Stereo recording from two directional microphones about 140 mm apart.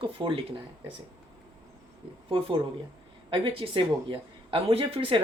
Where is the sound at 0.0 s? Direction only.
35° right (ahead or behind).